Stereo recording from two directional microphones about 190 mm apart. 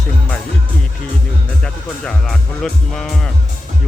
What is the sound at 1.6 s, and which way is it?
Speech, 5° left (ahead or behind).